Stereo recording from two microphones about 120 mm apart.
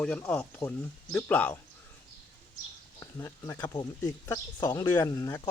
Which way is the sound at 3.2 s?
25° left (ahead or behind).